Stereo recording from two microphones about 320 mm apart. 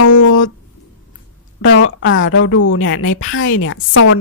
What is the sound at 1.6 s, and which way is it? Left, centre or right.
A woman's voice, left.